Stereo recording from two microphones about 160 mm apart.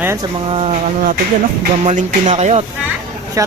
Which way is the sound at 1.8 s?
45° right (ahead or behind).